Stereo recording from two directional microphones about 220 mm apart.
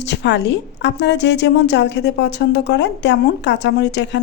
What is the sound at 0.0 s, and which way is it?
A woman's voice, 50° left (ahead or behind).